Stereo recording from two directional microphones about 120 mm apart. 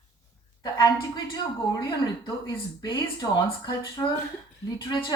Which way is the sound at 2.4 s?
40° left (ahead or behind).